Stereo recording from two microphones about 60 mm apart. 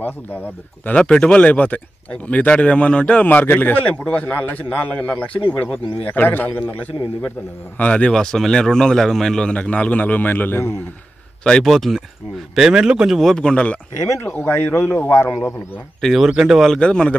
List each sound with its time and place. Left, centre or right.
0.8 s speech: centre
3.3 s a man's voice: left
3.8 s a man's voice: left
11.6 s speech: centre
12.5 s speech: centre
13.2 s speech: centre
14.0 s speech: left
14.4 s a man's voice: left
16.0 s speech: centre
16.6 s speech: centre